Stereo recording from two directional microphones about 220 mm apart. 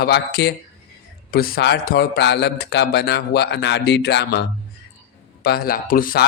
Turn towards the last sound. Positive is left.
turn(degrees=40)  # may be behind; listen again after turning